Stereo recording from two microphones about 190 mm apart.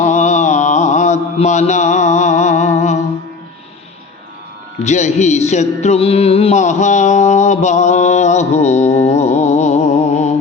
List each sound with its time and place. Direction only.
0.0 s mantra: 40° left (ahead or behind)
4.8 s music: 40° left (ahead or behind)